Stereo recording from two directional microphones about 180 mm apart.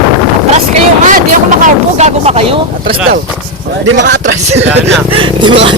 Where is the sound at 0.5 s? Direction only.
40° right (ahead or behind).